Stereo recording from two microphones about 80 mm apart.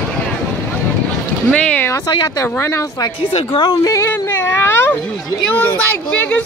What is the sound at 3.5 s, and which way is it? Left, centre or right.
Speech, left.